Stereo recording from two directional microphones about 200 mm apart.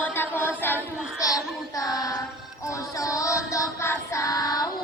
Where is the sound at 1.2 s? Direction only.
15° left (ahead or behind).